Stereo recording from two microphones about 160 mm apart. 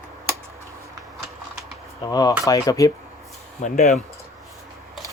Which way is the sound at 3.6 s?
50° left (ahead or behind).